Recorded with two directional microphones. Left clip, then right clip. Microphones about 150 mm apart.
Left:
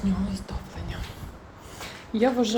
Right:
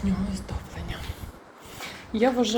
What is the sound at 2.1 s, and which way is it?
Speech, 30° left (ahead or behind).